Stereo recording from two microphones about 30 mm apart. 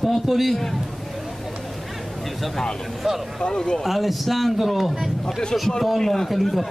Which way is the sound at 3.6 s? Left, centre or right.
Left.